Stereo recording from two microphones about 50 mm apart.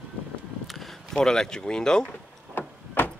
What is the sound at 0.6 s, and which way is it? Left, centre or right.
Speech, centre.